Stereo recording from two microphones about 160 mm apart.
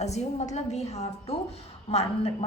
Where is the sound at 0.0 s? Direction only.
45° left (ahead or behind).